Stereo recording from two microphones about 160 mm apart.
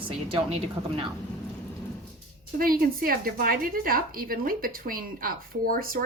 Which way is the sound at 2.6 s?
65° right (ahead or behind).